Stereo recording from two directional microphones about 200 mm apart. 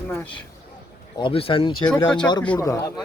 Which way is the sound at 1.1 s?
25° left (ahead or behind).